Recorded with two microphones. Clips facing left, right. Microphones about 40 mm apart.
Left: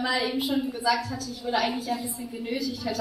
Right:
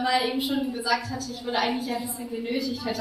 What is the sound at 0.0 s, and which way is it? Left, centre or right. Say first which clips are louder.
Speech: right 2 dB; right.